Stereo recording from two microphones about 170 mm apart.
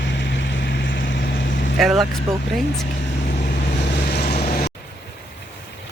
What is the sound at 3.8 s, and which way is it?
Vehicle, 80° left.